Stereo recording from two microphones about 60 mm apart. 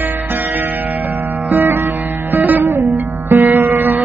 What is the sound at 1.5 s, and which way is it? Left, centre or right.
Music, right.